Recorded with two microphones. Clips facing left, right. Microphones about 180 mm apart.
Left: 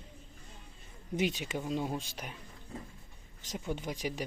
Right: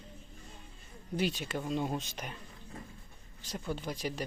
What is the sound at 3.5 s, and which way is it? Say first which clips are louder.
Speech: even; 15° left (ahead or behind).